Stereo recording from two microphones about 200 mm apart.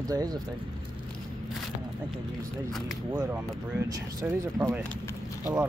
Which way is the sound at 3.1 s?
10° right (ahead or behind).